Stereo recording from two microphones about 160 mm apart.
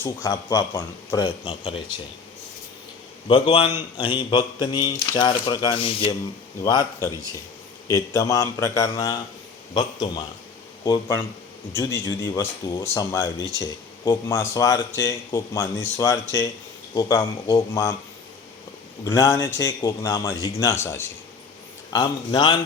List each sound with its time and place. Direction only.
0.0 s speech: 20° left (ahead or behind)
1.5 s a man's voice: 35° left (ahead or behind)
3.2 s a man's voice: 30° left (ahead or behind)
6.6 s speech: 25° left (ahead or behind)
19.0 s speech: 20° left (ahead or behind)